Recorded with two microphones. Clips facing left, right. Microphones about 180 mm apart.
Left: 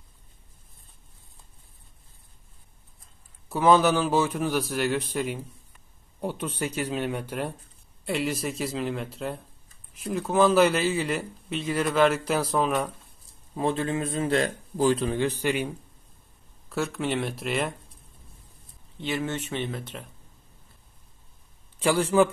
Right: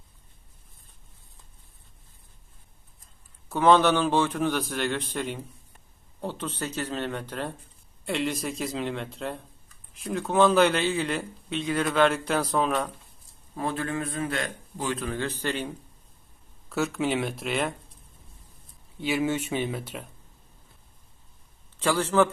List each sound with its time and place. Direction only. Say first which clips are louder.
3.4 s a man's voice: even; 10° left (ahead or behind)
13.6 s a man's voice: left 3 dB; 20° left (ahead or behind)
15.0 s a man's voice: left 4 dB; 15° left (ahead or behind)
16.6 s a man's voice: right 2 dB; centre (ahead or behind)
18.9 s speech: right 3 dB; 10° right (ahead or behind)
21.7 s a man's voice: left 2 dB; 10° left (ahead or behind)